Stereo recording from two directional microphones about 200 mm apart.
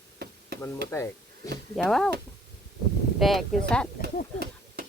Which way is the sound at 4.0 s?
45° left (ahead or behind).